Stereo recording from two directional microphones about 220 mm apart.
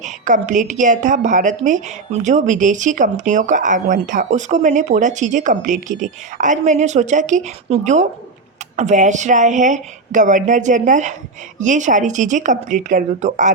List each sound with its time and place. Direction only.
0.0 s a woman's voice: 35° right (ahead or behind)